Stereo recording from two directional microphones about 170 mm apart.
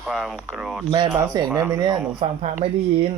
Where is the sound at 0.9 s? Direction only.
25° right (ahead or behind).